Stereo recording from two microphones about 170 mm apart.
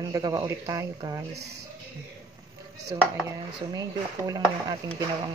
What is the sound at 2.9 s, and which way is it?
Speech, 20° right (ahead or behind).